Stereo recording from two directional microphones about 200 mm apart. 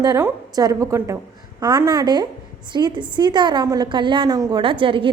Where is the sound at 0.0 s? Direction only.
15° right (ahead or behind).